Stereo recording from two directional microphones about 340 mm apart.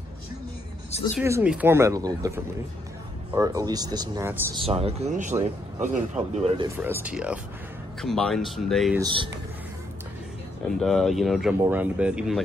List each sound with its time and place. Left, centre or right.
1.2 s speech: centre
4.6 s speech: centre
6.8 s speech: centre
9.0 s speech: centre
10.8 s speech: centre